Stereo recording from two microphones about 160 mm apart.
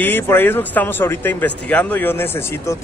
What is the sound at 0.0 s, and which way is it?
Speech, 15° left (ahead or behind).